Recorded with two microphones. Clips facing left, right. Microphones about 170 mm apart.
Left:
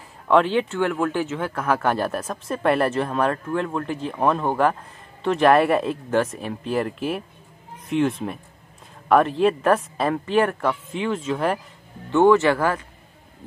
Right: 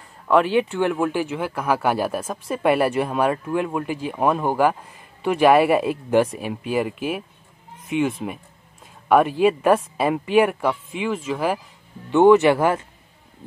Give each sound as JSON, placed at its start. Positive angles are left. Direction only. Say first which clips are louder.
{"t": 0.3, "sound": "speech", "louder": "right 1 dB", "side_deg": -10}
{"t": 9.1, "sound": "speech", "louder": "right 1 dB", "side_deg": -5}
{"t": 12.1, "sound": "speech", "louder": "right 2 dB", "side_deg": -20}